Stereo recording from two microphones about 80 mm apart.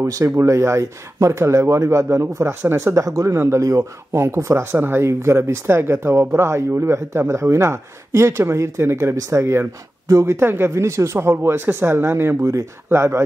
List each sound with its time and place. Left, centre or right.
0.0 s speech: right